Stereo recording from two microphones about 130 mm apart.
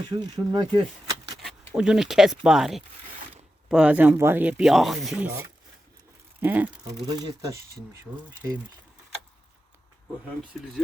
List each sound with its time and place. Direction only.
0.1 s speech: 30° right (ahead or behind)
1.7 s speech: 5° right (ahead or behind)
4.7 s speech: centre (ahead or behind)
6.4 s speech: 15° right (ahead or behind)
7.1 s speech: 30° right (ahead or behind)